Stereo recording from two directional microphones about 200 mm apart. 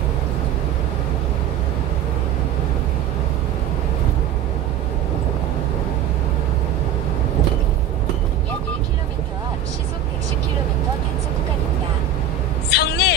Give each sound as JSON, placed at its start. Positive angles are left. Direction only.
{"t": 12.7, "sound": "vehicle", "side_deg": 55}